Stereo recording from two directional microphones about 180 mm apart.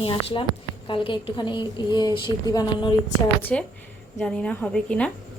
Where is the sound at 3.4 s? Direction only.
10° left (ahead or behind).